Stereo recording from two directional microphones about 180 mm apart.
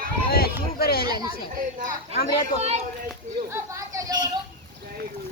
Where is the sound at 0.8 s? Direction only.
55° left (ahead or behind).